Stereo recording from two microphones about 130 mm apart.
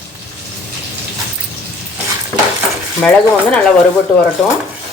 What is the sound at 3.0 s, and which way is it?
Speech, 5° left (ahead or behind).